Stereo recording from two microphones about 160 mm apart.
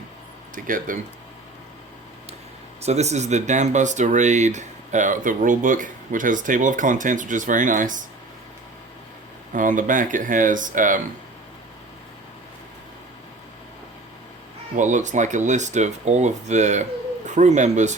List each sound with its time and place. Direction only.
0.5 s speech: 55° right (ahead or behind)
2.8 s speech: 45° right (ahead or behind)
9.5 s speech: 55° right (ahead or behind)
14.8 s speech: 50° right (ahead or behind)